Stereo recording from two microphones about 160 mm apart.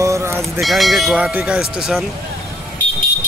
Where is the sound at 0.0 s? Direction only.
15° right (ahead or behind).